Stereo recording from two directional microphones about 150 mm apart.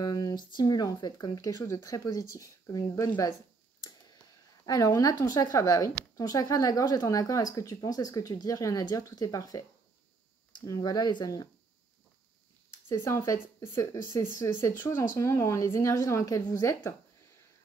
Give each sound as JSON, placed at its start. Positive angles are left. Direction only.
{"t": 0.0, "sound": "speech", "side_deg": 25}
{"t": 4.6, "sound": "speech", "side_deg": 25}
{"t": 12.8, "sound": "speech", "side_deg": 15}